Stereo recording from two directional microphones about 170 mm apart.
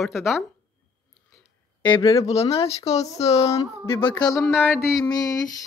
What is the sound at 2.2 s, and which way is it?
Speech, 35° left (ahead or behind).